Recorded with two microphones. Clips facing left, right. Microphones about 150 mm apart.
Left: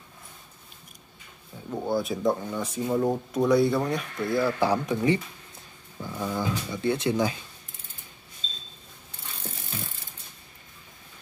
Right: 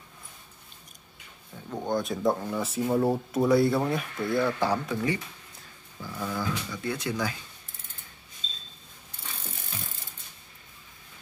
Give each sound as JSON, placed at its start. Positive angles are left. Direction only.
{"t": 1.7, "sound": "speech", "side_deg": 5}
{"t": 4.6, "sound": "speech", "side_deg": 15}